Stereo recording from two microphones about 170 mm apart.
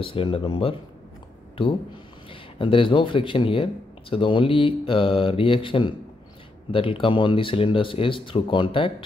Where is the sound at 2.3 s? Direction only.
30° left (ahead or behind).